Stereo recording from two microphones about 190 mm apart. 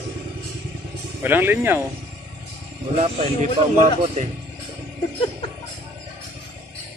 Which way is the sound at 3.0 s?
35° right (ahead or behind).